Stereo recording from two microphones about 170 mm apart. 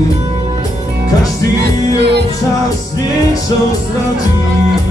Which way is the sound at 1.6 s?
80° right.